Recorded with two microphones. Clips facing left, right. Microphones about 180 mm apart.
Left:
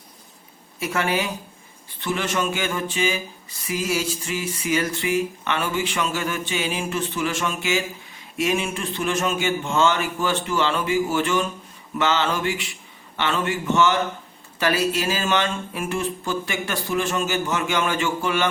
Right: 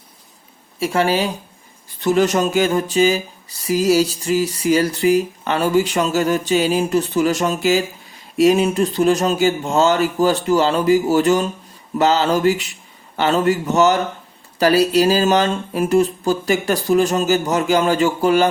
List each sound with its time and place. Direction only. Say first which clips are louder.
0.8 s speech: right 6 dB; 30° right (ahead or behind)